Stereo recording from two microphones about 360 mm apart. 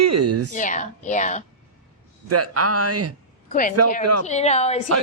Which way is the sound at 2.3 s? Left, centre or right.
Right.